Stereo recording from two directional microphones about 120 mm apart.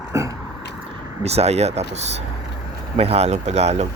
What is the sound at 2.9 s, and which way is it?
Speech, 55° right (ahead or behind).